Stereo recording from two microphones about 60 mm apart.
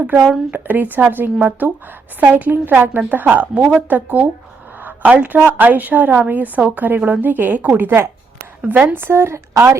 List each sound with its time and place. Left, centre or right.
0.5 s a woman's voice: right